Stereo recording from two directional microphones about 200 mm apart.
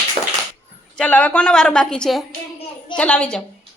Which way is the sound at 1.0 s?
5° left (ahead or behind).